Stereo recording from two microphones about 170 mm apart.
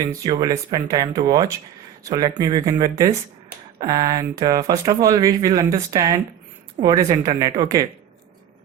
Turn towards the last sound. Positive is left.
turn(degrees=-20)  # may be behind; listen again after turning